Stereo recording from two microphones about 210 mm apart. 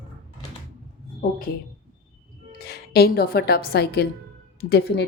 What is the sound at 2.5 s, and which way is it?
A woman's voice, 50° left (ahead or behind).